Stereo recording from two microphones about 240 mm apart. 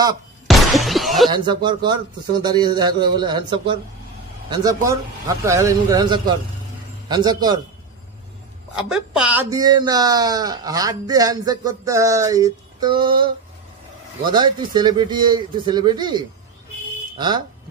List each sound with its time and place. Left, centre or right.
0.5 s music: centre
1.3 s speech: centre
8.7 s speech: centre